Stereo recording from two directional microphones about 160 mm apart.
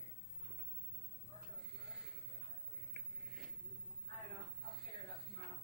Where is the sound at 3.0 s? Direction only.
Centre (ahead or behind).